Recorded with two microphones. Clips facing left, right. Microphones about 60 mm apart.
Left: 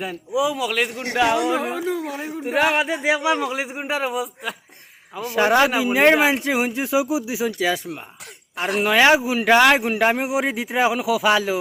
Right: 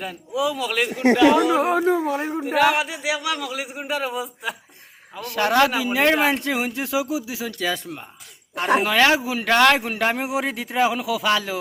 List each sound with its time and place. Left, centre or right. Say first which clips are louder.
0.0 s a man's voice: left 2 dB; centre
1.6 s a man's voice: right 5 dB; right
2.0 s a man's voice: right 5 dB; right
2.4 s a man's voice: even; centre
2.6 s a man's voice: left 1 dB; left; by 4.1 s centre
4.1 s a man's voice: left 2 dB; centre
5.1 s a man's voice: left 2 dB; centre
9.0 s a man's voice: left 4 dB; centre